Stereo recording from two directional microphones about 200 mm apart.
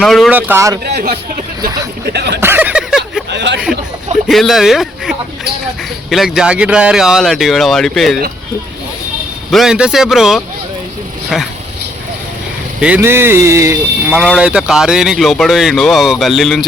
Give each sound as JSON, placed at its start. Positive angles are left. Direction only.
{"t": 0.0, "sound": "speech", "side_deg": 0}
{"t": 2.1, "sound": "speech", "side_deg": -55}
{"t": 2.4, "sound": "a sound", "side_deg": -10}
{"t": 3.2, "sound": "a sound", "side_deg": -60}
{"t": 4.3, "sound": "speech", "side_deg": 0}
{"t": 9.5, "sound": "speech", "side_deg": 0}
{"t": 12.8, "sound": "speech", "side_deg": -10}
{"t": 14.2, "sound": "speech", "side_deg": -5}